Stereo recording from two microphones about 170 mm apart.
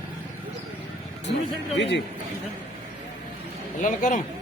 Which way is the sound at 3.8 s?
50° left (ahead or behind).